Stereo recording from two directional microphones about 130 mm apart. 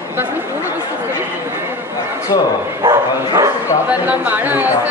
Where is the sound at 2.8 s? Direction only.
25° right (ahead or behind).